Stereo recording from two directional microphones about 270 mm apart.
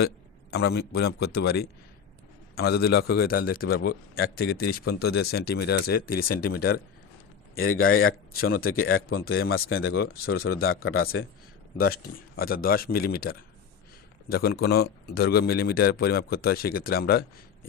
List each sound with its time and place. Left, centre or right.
0.5 s speech: left
7.5 s a man's voice: left
8.4 s speech: left
8.7 s a man's voice: left
9.2 s speech: left
11.0 s a man's voice: left
12.4 s speech: left